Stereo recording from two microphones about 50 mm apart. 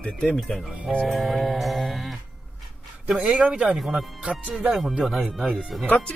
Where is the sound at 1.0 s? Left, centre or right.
Centre.